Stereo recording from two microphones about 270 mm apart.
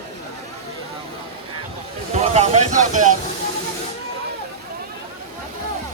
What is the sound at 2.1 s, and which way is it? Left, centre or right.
Speech, right.